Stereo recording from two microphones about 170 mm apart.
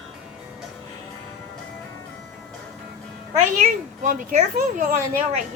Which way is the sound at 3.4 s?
50° right (ahead or behind).